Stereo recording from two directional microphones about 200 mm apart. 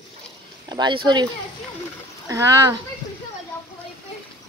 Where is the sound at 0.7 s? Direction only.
20° right (ahead or behind).